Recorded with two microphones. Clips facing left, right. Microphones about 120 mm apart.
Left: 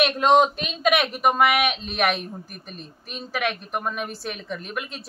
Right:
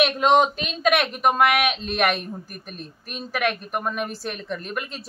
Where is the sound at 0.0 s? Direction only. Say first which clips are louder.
Even; centre (ahead or behind).